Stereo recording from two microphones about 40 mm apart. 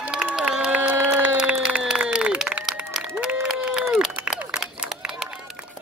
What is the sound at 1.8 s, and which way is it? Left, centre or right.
Applause, right.